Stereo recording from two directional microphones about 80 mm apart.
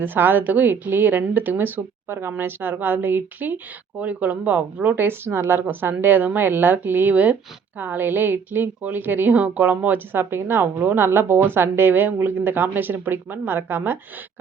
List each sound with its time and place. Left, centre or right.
0.0 s a woman's voice: right